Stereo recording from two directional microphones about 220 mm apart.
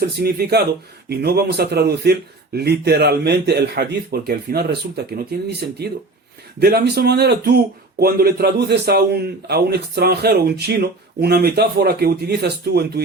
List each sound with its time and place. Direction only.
0.2 s a man's voice: 45° right (ahead or behind)